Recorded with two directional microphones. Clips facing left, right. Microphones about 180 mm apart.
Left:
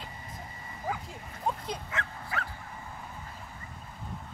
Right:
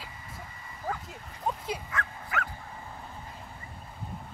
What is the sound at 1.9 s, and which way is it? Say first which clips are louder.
Dog: right 2 dB; 30° left (ahead or behind).